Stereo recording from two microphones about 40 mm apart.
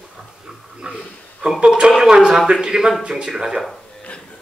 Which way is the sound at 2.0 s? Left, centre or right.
Centre.